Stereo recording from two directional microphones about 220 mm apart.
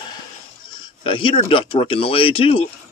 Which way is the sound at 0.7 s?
20° left (ahead or behind).